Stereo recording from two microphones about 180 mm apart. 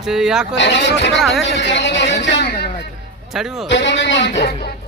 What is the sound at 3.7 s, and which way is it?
Speech, 80° left.